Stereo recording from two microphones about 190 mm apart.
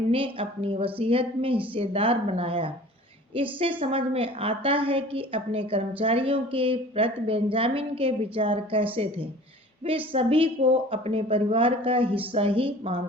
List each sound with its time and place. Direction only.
0.1 s a woman's voice: 30° right (ahead or behind)